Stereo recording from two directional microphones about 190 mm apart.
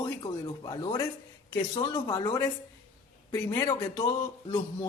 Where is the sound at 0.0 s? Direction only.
20° left (ahead or behind).